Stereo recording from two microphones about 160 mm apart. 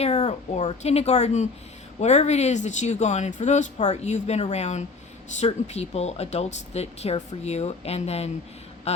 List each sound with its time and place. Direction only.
0.0 s speech: 40° left (ahead or behind)